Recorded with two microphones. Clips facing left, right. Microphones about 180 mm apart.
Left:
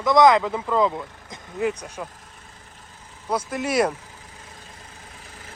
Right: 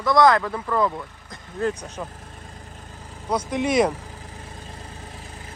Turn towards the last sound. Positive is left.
turn(degrees=5)  # may be behind; listen again after turning